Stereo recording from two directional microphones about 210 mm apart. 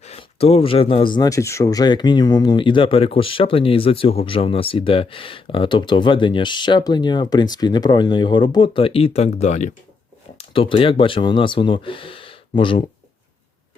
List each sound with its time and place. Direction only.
0.0 s speech: 30° left (ahead or behind)